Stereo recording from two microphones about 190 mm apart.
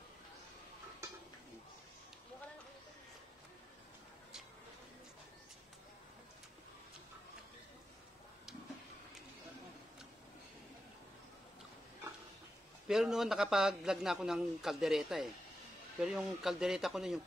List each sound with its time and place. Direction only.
12.8 s a man's voice: 5° right (ahead or behind)